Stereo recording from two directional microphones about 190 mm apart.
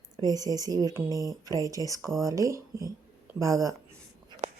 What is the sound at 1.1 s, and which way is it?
Speech, 20° left (ahead or behind).